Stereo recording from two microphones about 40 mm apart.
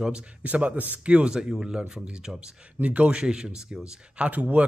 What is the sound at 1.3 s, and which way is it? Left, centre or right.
Speech, centre.